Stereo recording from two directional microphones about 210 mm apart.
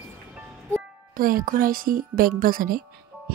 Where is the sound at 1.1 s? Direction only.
40° right (ahead or behind).